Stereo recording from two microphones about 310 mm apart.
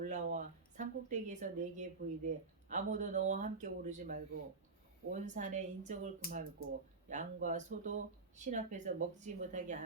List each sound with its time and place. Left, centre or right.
0.0 s a woman's voice: right